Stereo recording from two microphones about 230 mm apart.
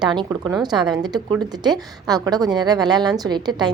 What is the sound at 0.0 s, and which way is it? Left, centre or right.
A woman's voice, centre.